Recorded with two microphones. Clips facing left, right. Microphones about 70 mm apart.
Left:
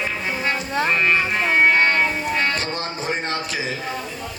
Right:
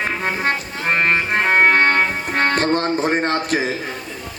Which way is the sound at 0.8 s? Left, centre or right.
Right.